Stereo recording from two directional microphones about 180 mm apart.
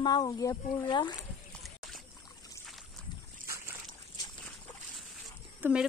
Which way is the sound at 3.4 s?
15° right (ahead or behind).